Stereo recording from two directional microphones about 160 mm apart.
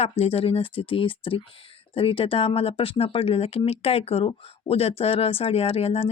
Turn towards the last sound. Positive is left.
turn(degrees=40)  # may be behind; listen again after turning